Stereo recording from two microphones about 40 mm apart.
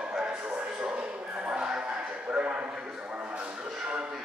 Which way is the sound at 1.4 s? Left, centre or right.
Right.